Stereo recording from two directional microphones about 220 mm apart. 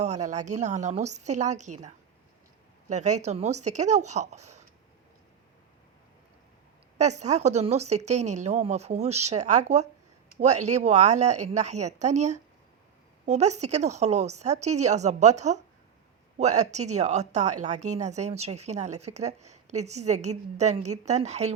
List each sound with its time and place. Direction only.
0.0 s a woman's voice: 30° right (ahead or behind)
2.9 s a woman's voice: 30° right (ahead or behind)
7.0 s a woman's voice: 30° right (ahead or behind)